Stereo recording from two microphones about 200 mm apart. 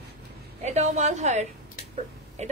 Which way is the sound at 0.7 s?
35° right (ahead or behind).